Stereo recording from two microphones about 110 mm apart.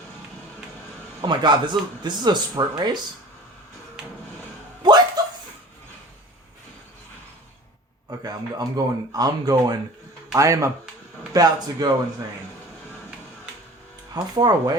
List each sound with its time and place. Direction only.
1.2 s a man's voice: 45° right (ahead or behind)
4.8 s a sound: 40° right (ahead or behind)
8.2 s speech: 35° right (ahead or behind)
14.1 s speech: 35° right (ahead or behind)